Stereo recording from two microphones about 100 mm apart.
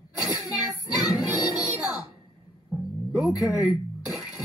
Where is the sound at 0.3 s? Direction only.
35° left (ahead or behind).